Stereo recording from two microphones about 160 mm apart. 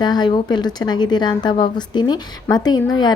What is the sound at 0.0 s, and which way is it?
A woman's voice, 25° left (ahead or behind).